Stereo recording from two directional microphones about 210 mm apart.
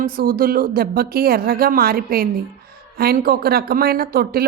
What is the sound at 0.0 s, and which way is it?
A woman's voice, 45° right (ahead or behind).